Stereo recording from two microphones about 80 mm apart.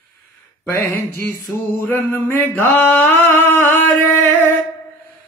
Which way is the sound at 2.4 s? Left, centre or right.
Left.